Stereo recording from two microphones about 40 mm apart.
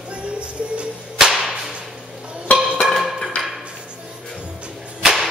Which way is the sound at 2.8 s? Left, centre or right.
Centre.